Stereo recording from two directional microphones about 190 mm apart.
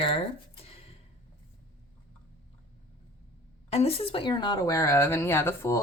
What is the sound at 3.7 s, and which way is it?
Speech, 30° left (ahead or behind).